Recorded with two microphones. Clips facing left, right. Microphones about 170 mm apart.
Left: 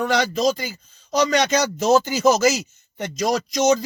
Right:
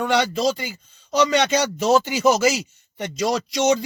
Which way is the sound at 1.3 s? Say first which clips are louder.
Even; 40° left (ahead or behind).